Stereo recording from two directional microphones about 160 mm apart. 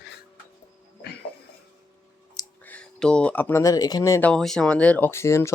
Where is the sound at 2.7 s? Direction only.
5° left (ahead or behind).